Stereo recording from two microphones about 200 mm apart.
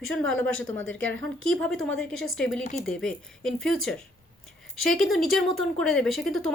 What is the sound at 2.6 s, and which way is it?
Speech, 40° left (ahead or behind).